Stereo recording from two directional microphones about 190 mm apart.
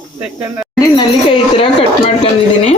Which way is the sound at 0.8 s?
25° left (ahead or behind).